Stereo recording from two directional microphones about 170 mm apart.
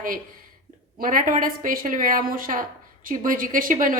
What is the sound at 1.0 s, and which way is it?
A woman's voice, 50° right (ahead or behind).